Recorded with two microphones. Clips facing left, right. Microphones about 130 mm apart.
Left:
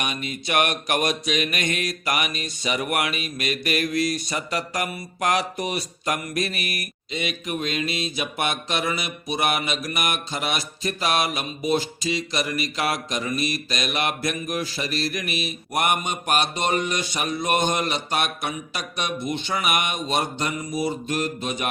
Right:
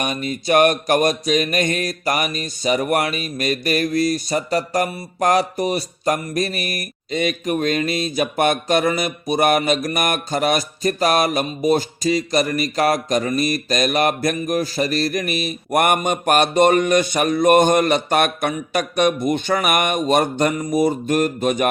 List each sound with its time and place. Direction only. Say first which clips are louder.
0.0 s mantra: right 6 dB; 40° right (ahead or behind)